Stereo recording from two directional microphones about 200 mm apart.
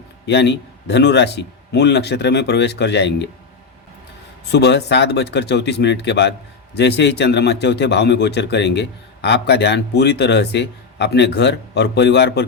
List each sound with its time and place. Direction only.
0.3 s a man's voice: 60° left (ahead or behind)
4.5 s a man's voice: 55° left (ahead or behind)